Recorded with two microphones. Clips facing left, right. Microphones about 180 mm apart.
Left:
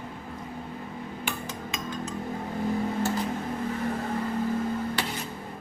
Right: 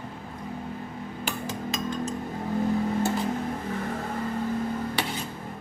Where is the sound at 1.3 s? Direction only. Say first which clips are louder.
Right 5 dB; 40° right (ahead or behind).